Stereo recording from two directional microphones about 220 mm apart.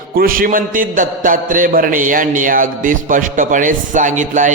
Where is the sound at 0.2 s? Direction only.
40° right (ahead or behind).